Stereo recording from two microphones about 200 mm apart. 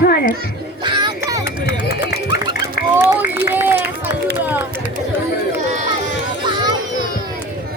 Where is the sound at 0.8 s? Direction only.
20° right (ahead or behind).